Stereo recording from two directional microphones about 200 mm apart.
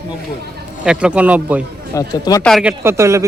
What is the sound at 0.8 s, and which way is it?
Speech, 5° right (ahead or behind).